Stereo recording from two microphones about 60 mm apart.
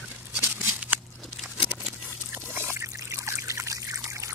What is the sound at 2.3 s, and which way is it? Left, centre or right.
Trickle, right.